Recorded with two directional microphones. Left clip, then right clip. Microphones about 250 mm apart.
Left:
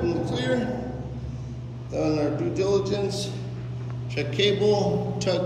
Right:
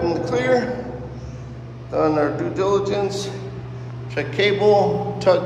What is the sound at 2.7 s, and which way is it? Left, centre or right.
Speech, centre.